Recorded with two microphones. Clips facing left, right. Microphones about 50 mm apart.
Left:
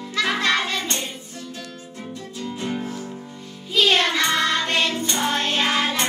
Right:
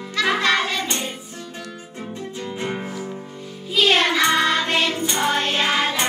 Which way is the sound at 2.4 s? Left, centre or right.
Right.